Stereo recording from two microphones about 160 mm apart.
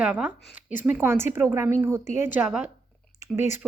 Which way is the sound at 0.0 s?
10° right (ahead or behind).